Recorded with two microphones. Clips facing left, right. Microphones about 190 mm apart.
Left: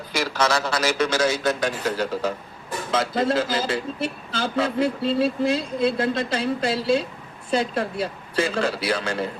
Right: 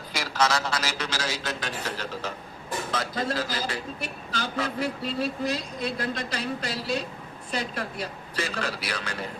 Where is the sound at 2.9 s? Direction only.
25° left (ahead or behind).